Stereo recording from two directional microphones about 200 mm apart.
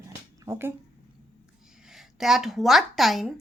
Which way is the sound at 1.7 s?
5° right (ahead or behind).